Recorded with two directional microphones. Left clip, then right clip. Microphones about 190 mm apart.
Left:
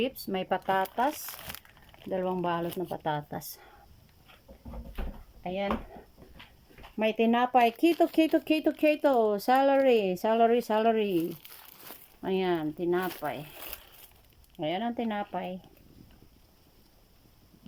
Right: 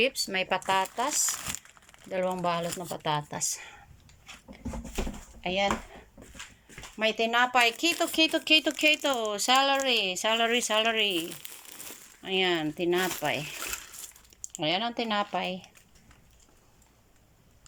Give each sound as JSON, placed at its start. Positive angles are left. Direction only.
{"t": 0.0, "sound": "speech", "side_deg": 15}
{"t": 0.4, "sound": "speech", "side_deg": 0}
{"t": 5.4, "sound": "speech", "side_deg": 5}
{"t": 7.0, "sound": "speech", "side_deg": 15}
{"t": 11.1, "sound": "speech", "side_deg": -15}
{"t": 12.2, "sound": "speech", "side_deg": 15}
{"t": 14.5, "sound": "speech", "side_deg": 5}